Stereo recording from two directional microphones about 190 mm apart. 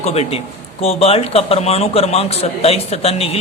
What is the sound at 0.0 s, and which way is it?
Speech, 35° left (ahead or behind).